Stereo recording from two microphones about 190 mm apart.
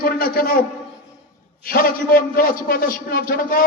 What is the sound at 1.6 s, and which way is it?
A man's voice, 50° left (ahead or behind).